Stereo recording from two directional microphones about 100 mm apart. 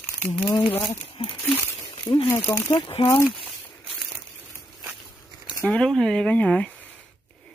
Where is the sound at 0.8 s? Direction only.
55° left (ahead or behind).